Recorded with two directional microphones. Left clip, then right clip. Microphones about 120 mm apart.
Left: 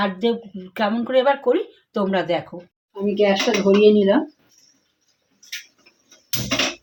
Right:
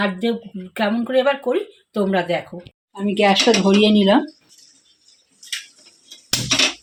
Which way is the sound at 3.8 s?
90° right.